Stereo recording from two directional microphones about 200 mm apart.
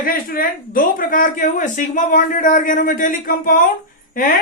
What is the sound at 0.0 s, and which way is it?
A man's voice, 45° left (ahead or behind).